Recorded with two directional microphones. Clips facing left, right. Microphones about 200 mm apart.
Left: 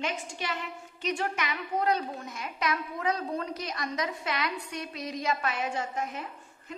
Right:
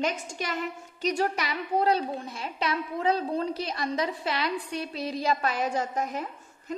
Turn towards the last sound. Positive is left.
turn(degrees=-40)  # may be behind; listen again after turning